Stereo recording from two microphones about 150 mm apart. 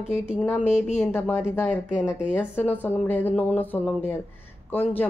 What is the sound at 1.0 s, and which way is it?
Speech, 15° left (ahead or behind).